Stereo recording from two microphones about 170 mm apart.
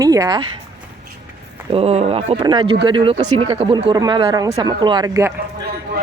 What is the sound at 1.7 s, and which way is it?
Speech, 35° right (ahead or behind).